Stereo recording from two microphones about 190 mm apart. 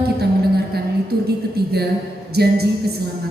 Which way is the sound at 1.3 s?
55° right (ahead or behind).